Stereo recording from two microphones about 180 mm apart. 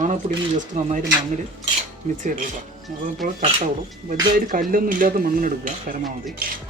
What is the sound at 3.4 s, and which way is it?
Speech, 45° right (ahead or behind).